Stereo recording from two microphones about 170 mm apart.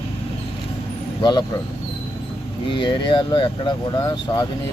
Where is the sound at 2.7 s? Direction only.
25° left (ahead or behind).